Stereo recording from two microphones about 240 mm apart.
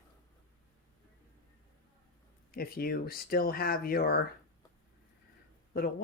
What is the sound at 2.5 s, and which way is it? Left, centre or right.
Speech, left.